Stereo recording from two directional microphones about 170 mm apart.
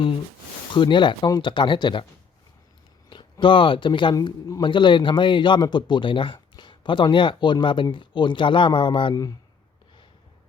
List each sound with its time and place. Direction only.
0.7 s speech: 30° left (ahead or behind)
3.1 s speech: 25° left (ahead or behind)